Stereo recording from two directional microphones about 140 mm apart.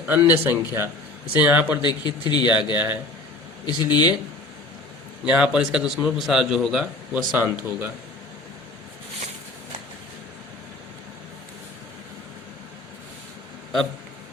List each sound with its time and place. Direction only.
0.0 s a man's voice: 15° right (ahead or behind)
1.8 s speech: 30° left (ahead or behind)
2.7 s a man's voice: 15° right (ahead or behind)
3.7 s speech: 30° left (ahead or behind)
5.2 s a man's voice: 5° right (ahead or behind)